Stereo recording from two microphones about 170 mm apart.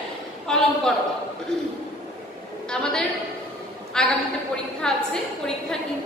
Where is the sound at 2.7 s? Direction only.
5° left (ahead or behind).